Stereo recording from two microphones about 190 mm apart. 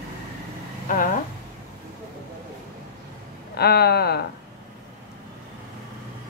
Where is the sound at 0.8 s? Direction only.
45° left (ahead or behind).